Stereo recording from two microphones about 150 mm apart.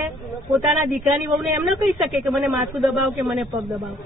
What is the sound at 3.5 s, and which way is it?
Speech, 25° right (ahead or behind).